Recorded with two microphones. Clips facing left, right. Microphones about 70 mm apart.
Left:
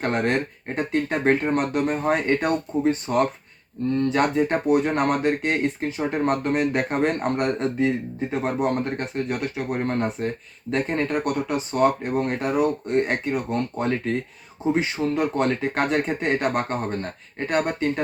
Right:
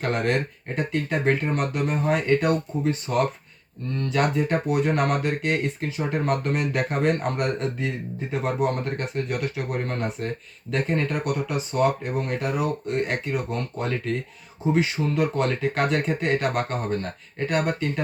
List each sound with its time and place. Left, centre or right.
0.0 s speech: left